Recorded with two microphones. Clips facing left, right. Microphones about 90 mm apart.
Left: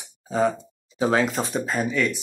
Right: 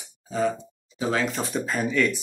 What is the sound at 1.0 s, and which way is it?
Speech, 35° left (ahead or behind).